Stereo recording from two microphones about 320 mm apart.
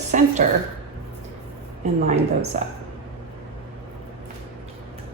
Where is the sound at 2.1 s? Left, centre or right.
Centre.